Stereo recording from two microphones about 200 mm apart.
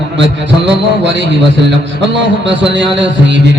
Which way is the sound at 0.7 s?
60° right (ahead or behind).